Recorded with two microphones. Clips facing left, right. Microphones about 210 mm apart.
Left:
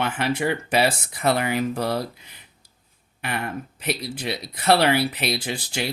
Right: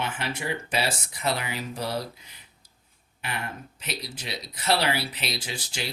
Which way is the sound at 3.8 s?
60° left (ahead or behind).